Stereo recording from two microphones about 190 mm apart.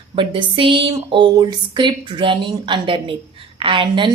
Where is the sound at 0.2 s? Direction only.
25° right (ahead or behind).